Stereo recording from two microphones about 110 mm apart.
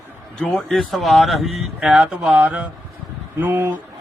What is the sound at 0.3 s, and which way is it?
A man's voice, 5° left (ahead or behind).